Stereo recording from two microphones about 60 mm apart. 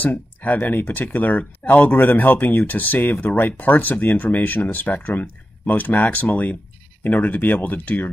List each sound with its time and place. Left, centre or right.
0.0 s speech: left